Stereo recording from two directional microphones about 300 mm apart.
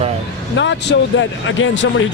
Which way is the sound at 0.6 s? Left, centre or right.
Left.